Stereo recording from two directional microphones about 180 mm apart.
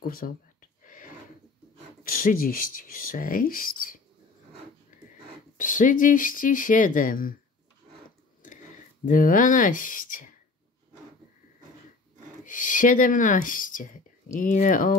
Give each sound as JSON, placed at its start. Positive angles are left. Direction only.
{"t": 0.0, "sound": "a sound", "side_deg": 55}
{"t": 2.0, "sound": "speech", "side_deg": 55}
{"t": 5.6, "sound": "speech", "side_deg": 45}
{"t": 9.0, "sound": "speech", "side_deg": 50}
{"t": 12.4, "sound": "speech", "side_deg": 45}